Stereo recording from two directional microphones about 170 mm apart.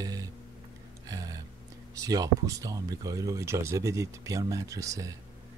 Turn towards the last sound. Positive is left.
turn(degrees=-20)  # may be behind; listen again after turning